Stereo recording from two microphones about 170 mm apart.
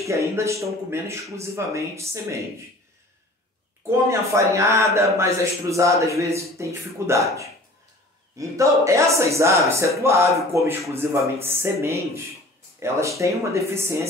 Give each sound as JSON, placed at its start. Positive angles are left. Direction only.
{"t": 0.0, "sound": "a man's voice", "side_deg": -15}
{"t": 3.8, "sound": "a man's voice", "side_deg": -15}
{"t": 13.2, "sound": "a man's voice", "side_deg": -15}